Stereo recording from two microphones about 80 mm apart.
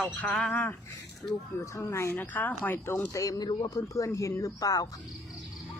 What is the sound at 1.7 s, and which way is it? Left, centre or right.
Speech, left.